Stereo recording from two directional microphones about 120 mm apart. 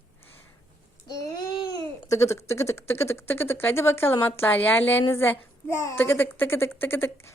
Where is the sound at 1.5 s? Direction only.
45° left (ahead or behind).